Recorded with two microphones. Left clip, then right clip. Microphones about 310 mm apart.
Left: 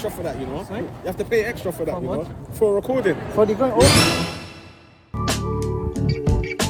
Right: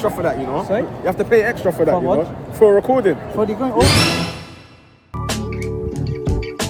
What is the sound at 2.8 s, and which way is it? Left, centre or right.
Speech, right.